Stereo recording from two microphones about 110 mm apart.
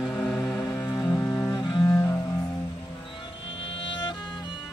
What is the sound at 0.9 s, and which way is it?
Cello, 15° left (ahead or behind).